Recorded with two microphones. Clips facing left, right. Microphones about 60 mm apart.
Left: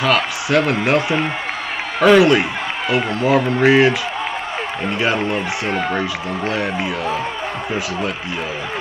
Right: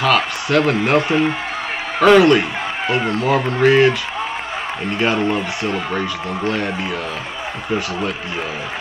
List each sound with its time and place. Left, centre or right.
0.0 s a man's voice: centre
4.9 s a man's voice: centre